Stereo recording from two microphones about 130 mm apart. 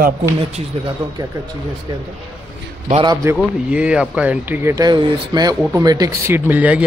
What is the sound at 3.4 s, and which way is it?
Speech, 5° right (ahead or behind).